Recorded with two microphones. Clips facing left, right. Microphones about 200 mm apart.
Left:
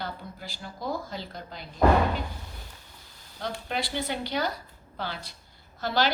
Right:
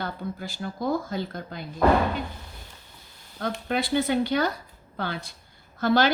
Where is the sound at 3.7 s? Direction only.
50° right (ahead or behind).